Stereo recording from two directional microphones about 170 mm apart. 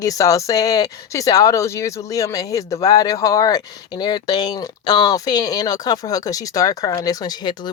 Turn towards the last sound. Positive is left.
turn(degrees=25)  # may be behind; listen again after turning